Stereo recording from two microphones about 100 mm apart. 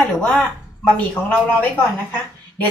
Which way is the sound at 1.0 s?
15° left (ahead or behind).